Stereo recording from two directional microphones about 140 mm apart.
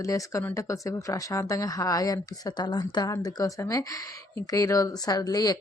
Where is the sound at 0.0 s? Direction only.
25° left (ahead or behind).